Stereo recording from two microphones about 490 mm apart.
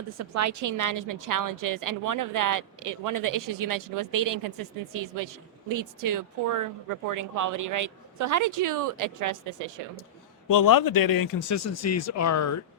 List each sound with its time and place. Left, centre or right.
0.2 s a woman's voice: right
10.5 s speech: left